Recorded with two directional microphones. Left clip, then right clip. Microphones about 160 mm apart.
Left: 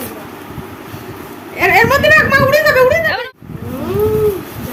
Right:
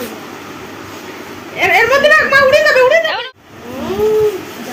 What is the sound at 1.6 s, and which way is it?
Speech, 90° left.